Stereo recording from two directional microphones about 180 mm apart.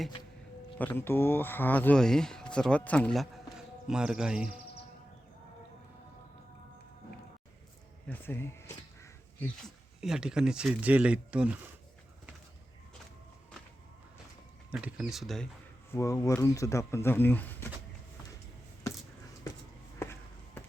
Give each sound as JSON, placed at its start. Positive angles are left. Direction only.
{"t": 0.8, "sound": "speech", "side_deg": 10}
{"t": 8.0, "sound": "crow", "side_deg": 10}
{"t": 9.6, "sound": "speech", "side_deg": -5}
{"t": 14.7, "sound": "speech", "side_deg": -5}
{"t": 15.9, "sound": "speech", "side_deg": 15}